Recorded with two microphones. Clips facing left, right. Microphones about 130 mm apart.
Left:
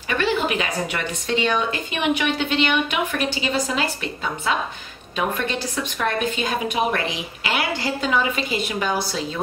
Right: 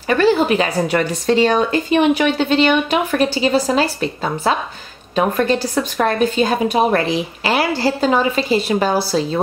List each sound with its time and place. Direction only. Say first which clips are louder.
0.1 s a woman's voice: right 8 dB; 35° right (ahead or behind)